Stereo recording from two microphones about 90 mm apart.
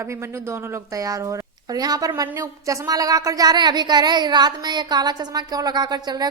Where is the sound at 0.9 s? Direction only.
40° right (ahead or behind).